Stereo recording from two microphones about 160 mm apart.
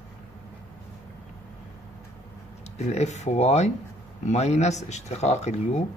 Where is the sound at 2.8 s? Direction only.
45° left (ahead or behind).